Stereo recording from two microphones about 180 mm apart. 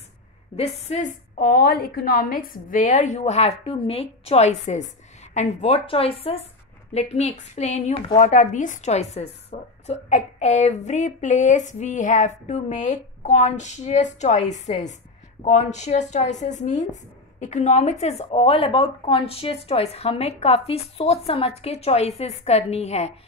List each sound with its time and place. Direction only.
0.6 s a woman's voice: 35° left (ahead or behind)
1.4 s a woman's voice: 55° left (ahead or behind); by 23.1 s 35° left (ahead or behind)